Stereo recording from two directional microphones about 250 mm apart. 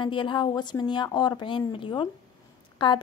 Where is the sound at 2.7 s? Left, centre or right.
Centre.